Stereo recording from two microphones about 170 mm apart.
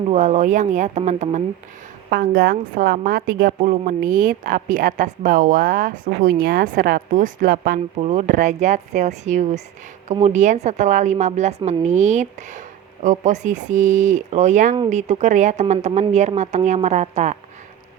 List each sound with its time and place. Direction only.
0.1 s a woman's voice: 45° right (ahead or behind)
2.0 s a woman's voice: 60° right (ahead or behind)
7.9 s a woman's voice: 40° right (ahead or behind)